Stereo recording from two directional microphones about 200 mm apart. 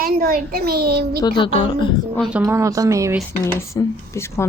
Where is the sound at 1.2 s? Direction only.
25° left (ahead or behind).